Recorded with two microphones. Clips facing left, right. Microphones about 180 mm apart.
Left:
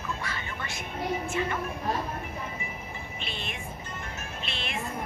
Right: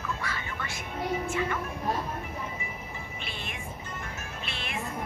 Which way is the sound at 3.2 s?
25° left (ahead or behind).